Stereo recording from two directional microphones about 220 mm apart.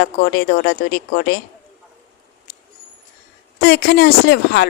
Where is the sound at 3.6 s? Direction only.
45° left (ahead or behind).